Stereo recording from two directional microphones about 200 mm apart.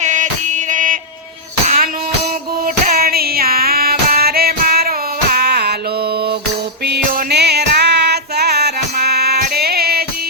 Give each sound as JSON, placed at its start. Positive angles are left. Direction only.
{"t": 0.0, "sound": "music", "side_deg": -40}
{"t": 2.8, "sound": "music", "side_deg": -50}
{"t": 5.3, "sound": "a sound", "side_deg": -50}
{"t": 6.8, "sound": "music", "side_deg": -55}